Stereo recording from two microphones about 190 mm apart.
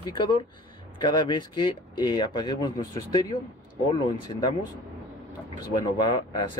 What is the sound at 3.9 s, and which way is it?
Speech, 25° left (ahead or behind).